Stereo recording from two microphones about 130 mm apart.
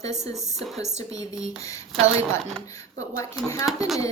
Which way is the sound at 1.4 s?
25° left (ahead or behind).